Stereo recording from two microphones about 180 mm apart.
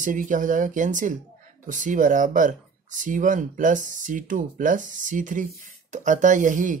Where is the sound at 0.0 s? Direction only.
45° right (ahead or behind).